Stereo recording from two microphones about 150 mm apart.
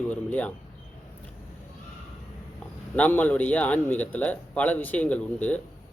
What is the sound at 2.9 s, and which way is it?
Speech, 10° left (ahead or behind).